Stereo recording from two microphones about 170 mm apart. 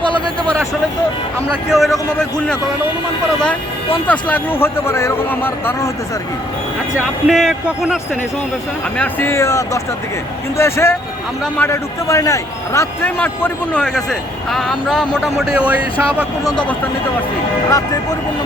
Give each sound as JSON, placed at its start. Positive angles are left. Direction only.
{"t": 1.7, "sound": "a man's voice", "side_deg": 0}
{"t": 4.0, "sound": "a man's voice", "side_deg": 10}
{"t": 7.3, "sound": "a man's voice", "side_deg": 0}
{"t": 9.0, "sound": "a man's voice", "side_deg": 15}
{"t": 16.4, "sound": "speech", "side_deg": 20}